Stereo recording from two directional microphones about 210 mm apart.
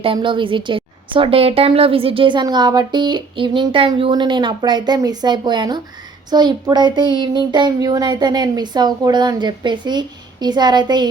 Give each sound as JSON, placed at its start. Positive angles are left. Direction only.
{"t": 0.0, "sound": "a woman's voice", "side_deg": -25}